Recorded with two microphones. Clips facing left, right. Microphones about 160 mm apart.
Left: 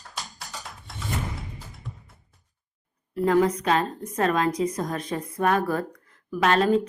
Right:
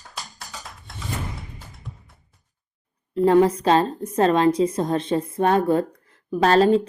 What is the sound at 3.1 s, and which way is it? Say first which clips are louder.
Speech: right 5 dB; 30° right (ahead or behind).